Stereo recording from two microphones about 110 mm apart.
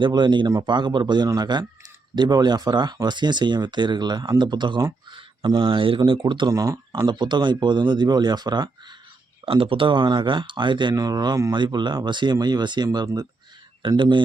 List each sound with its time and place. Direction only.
0.0 s speech: 45° right (ahead or behind)
6.5 s speech: 30° right (ahead or behind)
7.0 s speech: 45° right (ahead or behind)
9.5 s speech: 55° right (ahead or behind)